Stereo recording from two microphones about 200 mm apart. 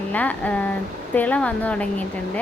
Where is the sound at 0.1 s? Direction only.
10° left (ahead or behind).